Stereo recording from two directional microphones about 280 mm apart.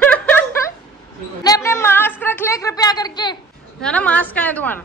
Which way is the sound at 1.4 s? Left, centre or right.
Centre.